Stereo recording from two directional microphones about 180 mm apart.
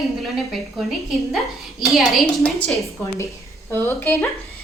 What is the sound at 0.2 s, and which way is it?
A woman's voice, centre (ahead or behind).